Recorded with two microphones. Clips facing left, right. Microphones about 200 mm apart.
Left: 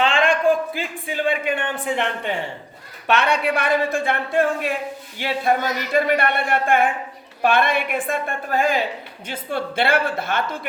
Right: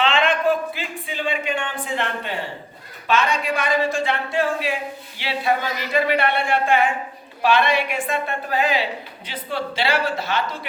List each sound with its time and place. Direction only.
0.0 s a sound: 45° left (ahead or behind)
1.0 s a woman's voice: 50° left (ahead or behind)
3.1 s a woman's voice: 65° left (ahead or behind)